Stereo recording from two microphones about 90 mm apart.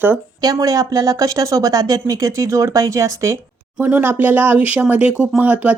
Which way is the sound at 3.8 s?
25° right (ahead or behind).